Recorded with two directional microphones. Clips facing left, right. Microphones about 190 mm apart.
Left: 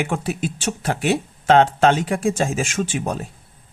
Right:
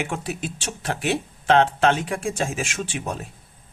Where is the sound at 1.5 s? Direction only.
40° left (ahead or behind).